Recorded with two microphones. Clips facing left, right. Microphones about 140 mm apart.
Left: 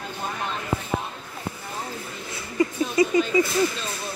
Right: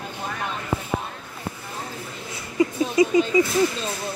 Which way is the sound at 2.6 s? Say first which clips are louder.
Right 2 dB; 20° right (ahead or behind).